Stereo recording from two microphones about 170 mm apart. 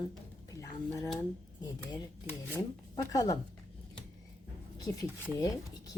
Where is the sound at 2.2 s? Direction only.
10° right (ahead or behind).